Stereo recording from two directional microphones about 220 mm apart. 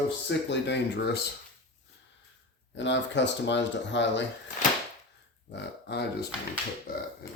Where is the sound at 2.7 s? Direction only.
55° left (ahead or behind).